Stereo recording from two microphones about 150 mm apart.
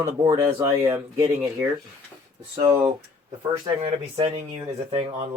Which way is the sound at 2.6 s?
30° right (ahead or behind).